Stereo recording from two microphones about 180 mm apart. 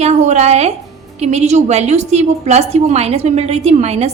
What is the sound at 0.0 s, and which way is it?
A woman's voice, 40° right (ahead or behind).